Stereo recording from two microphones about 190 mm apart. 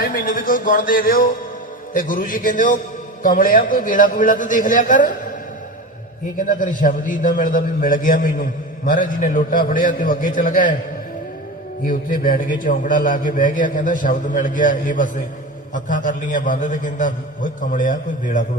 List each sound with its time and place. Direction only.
0.0 s a man's voice: 50° left (ahead or behind)
6.3 s a man's voice: 45° left (ahead or behind)
11.8 s a man's voice: 45° left (ahead or behind)